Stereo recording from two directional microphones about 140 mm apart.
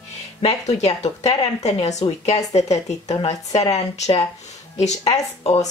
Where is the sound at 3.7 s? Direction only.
50° left (ahead or behind).